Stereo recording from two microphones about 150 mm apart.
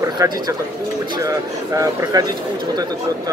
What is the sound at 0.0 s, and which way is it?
Speech, 20° right (ahead or behind).